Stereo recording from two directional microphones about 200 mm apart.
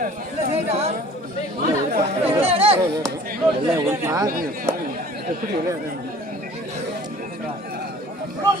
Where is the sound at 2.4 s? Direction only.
30° right (ahead or behind).